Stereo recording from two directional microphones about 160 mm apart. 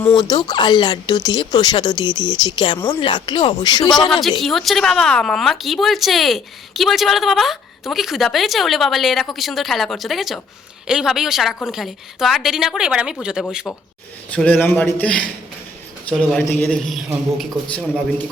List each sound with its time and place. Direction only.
0.2 s speech: 25° left (ahead or behind)
4.2 s speech: centre (ahead or behind)
13.7 s a man's voice: 10° left (ahead or behind)